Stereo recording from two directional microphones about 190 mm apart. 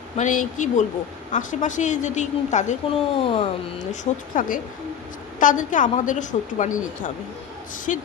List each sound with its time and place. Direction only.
0.2 s a woman's voice: 40° left (ahead or behind)
4.0 s a woman's voice: 45° left (ahead or behind)
7.9 s a woman's voice: 40° left (ahead or behind)